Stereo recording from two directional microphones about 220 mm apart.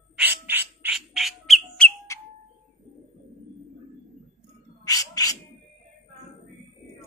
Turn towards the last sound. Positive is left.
turn(degrees=15)  # may be behind; listen again after turning